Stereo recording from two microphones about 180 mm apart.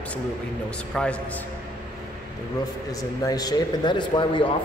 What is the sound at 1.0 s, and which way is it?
Speech, 5° left (ahead or behind).